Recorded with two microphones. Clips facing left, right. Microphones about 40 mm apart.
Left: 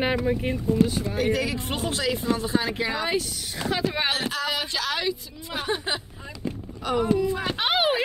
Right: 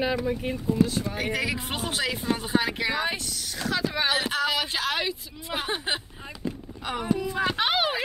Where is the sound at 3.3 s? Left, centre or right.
Left.